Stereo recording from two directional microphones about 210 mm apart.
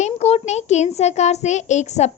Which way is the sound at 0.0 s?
30° left (ahead or behind).